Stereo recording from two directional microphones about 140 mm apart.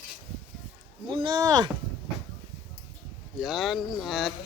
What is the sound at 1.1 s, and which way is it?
Speech, 35° right (ahead or behind).